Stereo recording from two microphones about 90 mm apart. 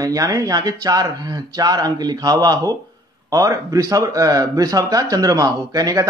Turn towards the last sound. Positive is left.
turn(degrees=-45)  # may be behind; listen again after turning